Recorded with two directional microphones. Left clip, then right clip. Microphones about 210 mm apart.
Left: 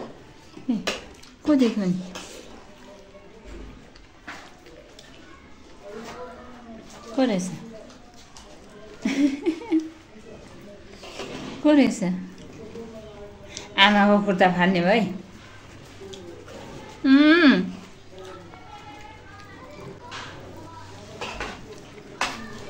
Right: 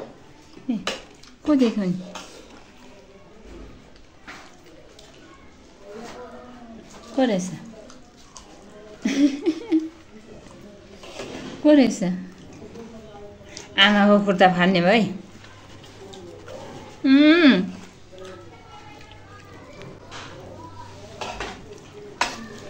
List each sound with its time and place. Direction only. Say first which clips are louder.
0.7 s a woman's voice: even; 5° right (ahead or behind)
7.2 s a woman's voice: right 2 dB; 10° right (ahead or behind)
9.0 s a sound: right 2 dB; 15° right (ahead or behind)
11.6 s a woman's voice: right 3 dB; 15° right (ahead or behind)
13.7 s a woman's voice: right 1 dB; 10° right (ahead or behind)
17.0 s a sound: right 1 dB; 5° right (ahead or behind)